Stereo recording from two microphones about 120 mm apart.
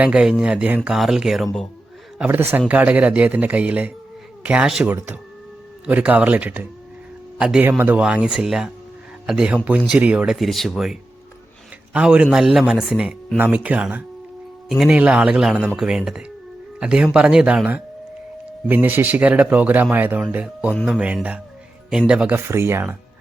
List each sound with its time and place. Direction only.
0.0 s speech: 5° right (ahead or behind)
2.1 s speech: 15° right (ahead or behind)
4.9 s speech: 20° right (ahead or behind)
10.3 s speech: centre (ahead or behind)
11.9 s speech: 10° right (ahead or behind)
14.7 s speech: centre (ahead or behind)
22.4 s speech: 20° right (ahead or behind)